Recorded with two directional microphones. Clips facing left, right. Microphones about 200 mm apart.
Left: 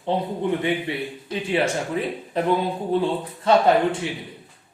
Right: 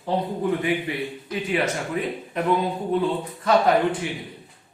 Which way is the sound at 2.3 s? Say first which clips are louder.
Left 1 dB; 30° left (ahead or behind).